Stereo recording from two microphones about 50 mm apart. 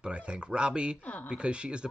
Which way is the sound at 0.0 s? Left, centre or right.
Right.